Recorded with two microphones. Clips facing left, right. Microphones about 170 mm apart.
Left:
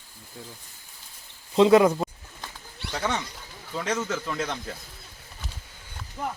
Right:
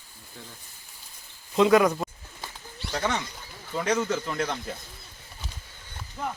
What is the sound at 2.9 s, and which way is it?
Speech, 5° right (ahead or behind).